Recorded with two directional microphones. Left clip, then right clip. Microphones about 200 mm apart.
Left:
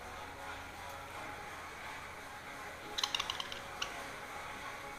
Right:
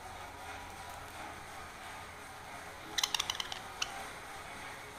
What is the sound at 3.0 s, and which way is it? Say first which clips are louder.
Typing: right 2 dB; 25° right (ahead or behind).